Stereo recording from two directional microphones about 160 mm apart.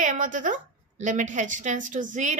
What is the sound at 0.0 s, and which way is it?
A woman's voice, 55° right (ahead or behind).